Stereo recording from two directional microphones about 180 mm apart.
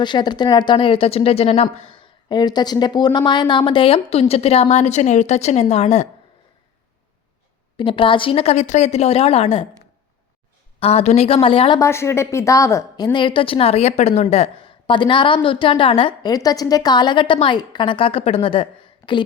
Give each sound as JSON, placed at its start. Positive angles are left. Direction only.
{"t": 0.0, "sound": "a woman's voice", "side_deg": 25}
{"t": 7.8, "sound": "a woman's voice", "side_deg": 30}
{"t": 10.8, "sound": "a woman's voice", "side_deg": 35}
{"t": 11.8, "sound": "a woman's voice", "side_deg": 15}